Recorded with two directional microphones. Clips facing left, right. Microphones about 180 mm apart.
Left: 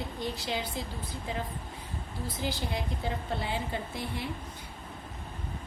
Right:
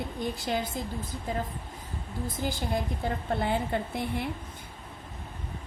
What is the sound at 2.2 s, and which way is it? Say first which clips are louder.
A woman's voice: right 2 dB; 50° right (ahead or behind).